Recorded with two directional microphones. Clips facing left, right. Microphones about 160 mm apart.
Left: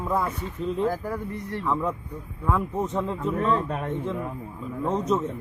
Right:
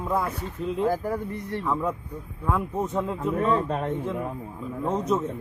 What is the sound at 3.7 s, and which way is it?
Speech, 30° right (ahead or behind).